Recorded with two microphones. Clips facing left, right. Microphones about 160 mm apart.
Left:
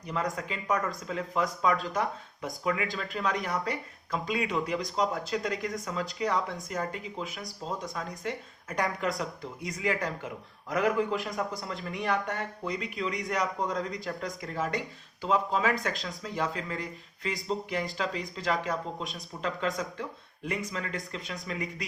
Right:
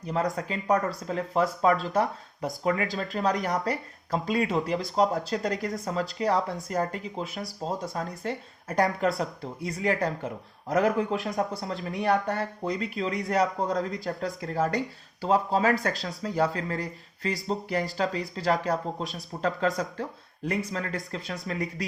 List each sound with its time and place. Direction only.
0.1 s speech: 35° right (ahead or behind)